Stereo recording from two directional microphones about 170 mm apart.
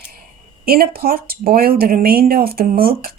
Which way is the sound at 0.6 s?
60° right (ahead or behind).